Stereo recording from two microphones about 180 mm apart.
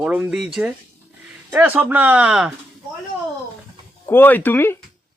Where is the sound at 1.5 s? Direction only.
10° right (ahead or behind).